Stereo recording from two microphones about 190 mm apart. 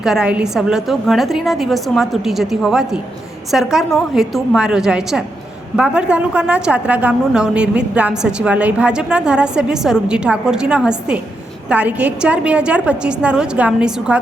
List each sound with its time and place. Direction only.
0.0 s a woman's voice: 5° right (ahead or behind)